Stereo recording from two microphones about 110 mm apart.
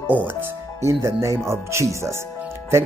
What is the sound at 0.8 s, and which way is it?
Speech, 25° right (ahead or behind).